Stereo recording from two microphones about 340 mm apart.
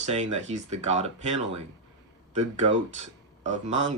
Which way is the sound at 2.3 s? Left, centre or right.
Centre.